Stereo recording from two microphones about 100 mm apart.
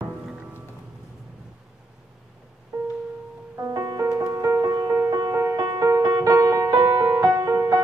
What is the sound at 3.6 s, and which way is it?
Music, 40° right (ahead or behind).